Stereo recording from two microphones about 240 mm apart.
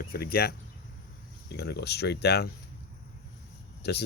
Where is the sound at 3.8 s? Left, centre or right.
Left.